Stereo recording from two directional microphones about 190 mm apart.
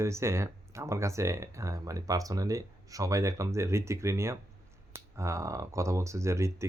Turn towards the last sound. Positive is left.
turn(degrees=-15)  # may be behind; listen again after turning